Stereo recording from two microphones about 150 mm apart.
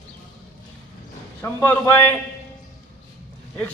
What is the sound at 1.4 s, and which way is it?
Speech, 15° left (ahead or behind).